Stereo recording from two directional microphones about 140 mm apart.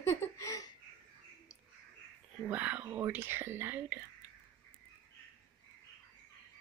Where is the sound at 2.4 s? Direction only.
10° right (ahead or behind).